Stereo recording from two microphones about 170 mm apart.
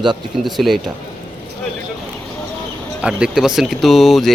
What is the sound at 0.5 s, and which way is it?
Speech, centre (ahead or behind).